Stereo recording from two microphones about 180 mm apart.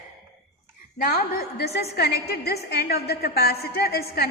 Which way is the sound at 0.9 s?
55° left (ahead or behind).